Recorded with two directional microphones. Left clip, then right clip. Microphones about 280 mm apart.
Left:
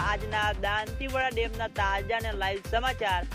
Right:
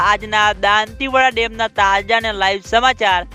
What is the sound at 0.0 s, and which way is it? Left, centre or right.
Speech, right.